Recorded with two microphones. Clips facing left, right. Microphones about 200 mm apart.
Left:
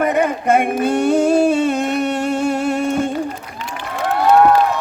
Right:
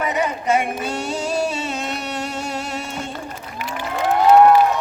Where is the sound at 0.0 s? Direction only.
55° left (ahead or behind).